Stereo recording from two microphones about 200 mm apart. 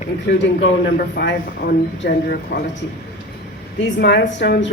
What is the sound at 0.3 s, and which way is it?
Speech, 60° left (ahead or behind).